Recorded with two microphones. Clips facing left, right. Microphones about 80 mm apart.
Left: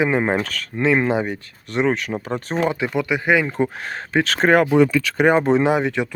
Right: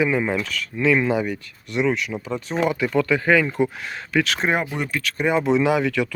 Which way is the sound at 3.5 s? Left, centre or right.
Left.